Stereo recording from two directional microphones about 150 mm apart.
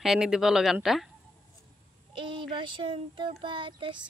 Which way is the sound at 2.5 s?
35° right (ahead or behind).